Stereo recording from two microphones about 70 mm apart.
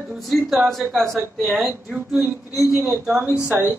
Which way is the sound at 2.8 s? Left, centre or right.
Centre.